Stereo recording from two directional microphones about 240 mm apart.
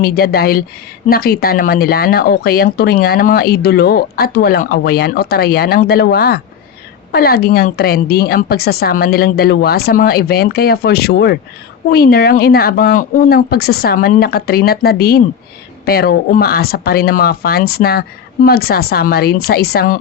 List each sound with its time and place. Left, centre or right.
0.0 s speech: left